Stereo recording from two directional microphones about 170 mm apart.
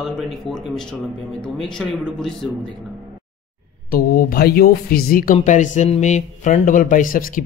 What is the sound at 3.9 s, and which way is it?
Speech, 65° left (ahead or behind).